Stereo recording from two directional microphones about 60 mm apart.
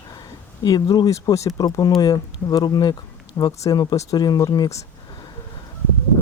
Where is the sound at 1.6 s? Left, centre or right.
Left.